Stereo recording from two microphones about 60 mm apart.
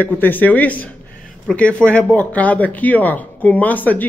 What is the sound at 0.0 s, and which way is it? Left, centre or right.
Speech, left.